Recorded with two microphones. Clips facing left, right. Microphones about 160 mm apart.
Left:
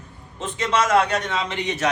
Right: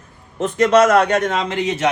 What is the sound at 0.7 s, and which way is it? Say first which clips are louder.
Speech: right 5 dB; 45° right (ahead or behind).